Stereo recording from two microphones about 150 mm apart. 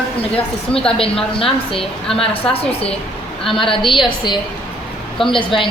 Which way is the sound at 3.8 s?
35° left (ahead or behind).